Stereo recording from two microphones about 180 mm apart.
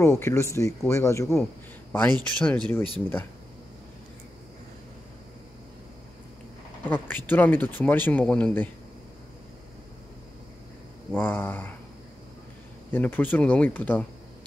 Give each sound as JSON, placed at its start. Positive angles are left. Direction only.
{"t": 0.0, "sound": "speech", "side_deg": 15}
{"t": 6.9, "sound": "speech", "side_deg": 10}
{"t": 11.1, "sound": "speech", "side_deg": 10}
{"t": 12.9, "sound": "speech", "side_deg": 10}